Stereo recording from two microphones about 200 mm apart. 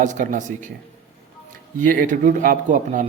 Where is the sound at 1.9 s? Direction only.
45° right (ahead or behind).